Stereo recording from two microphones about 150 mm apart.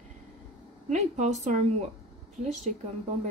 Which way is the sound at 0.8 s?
50° right (ahead or behind).